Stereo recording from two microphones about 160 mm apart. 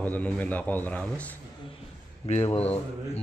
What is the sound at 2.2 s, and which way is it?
Speech, 40° left (ahead or behind).